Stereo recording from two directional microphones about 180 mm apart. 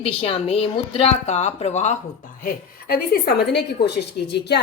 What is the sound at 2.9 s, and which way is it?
A woman's voice, 65° left (ahead or behind).